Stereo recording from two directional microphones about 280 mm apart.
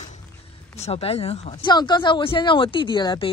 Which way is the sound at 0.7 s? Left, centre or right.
Left.